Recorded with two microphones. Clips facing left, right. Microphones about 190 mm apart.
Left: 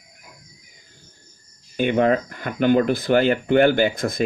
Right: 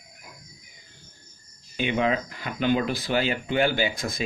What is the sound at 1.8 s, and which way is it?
Speech, 50° left (ahead or behind).